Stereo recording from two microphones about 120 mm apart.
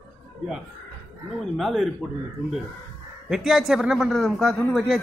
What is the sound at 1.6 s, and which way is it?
Speech, centre (ahead or behind).